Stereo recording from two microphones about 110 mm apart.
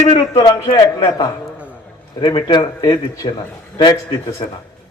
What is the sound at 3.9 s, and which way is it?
Speech, 30° left (ahead or behind).